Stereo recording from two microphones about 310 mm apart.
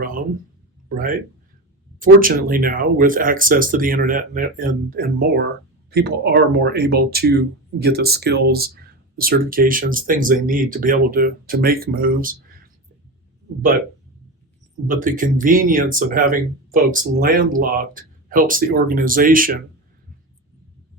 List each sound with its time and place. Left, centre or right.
0.9 s speech: right
2.2 s speech: right
14.8 s speech: right